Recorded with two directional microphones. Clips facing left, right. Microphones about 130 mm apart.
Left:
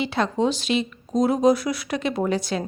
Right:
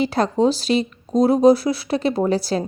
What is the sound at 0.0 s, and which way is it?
A woman's voice, 40° right (ahead or behind).